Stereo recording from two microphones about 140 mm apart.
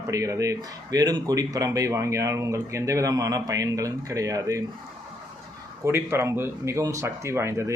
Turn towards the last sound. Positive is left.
turn(degrees=-20)  # may be behind; listen again after turning